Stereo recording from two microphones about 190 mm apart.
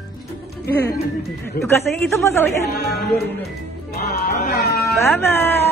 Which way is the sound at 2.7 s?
55° left (ahead or behind).